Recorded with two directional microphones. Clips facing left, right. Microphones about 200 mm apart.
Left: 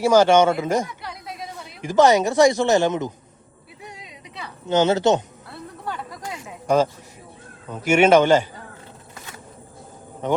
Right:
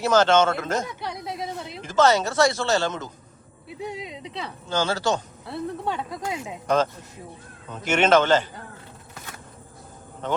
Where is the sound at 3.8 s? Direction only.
25° right (ahead or behind).